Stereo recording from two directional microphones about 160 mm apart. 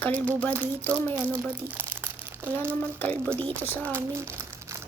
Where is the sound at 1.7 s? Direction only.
10° right (ahead or behind).